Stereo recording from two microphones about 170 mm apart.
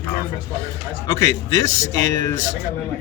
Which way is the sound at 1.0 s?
20° left (ahead or behind).